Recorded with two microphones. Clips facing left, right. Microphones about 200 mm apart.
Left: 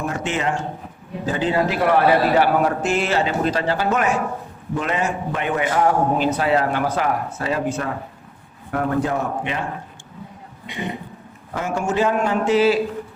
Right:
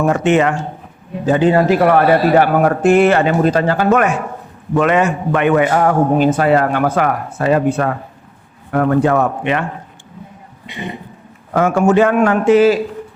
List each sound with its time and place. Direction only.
0.0 s speech: 70° right (ahead or behind)
1.3 s a man's voice: 55° right (ahead or behind)
4.7 s a man's voice: 70° right (ahead or behind)
11.5 s a man's voice: 65° right (ahead or behind); by 12.8 s 50° right (ahead or behind)